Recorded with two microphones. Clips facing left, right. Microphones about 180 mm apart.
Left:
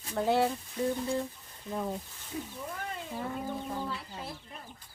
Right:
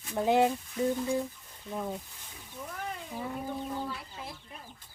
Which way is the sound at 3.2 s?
5° right (ahead or behind).